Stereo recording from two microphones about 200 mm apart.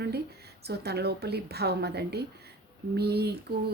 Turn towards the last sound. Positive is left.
turn(degrees=-55)  # may be behind; listen again after turning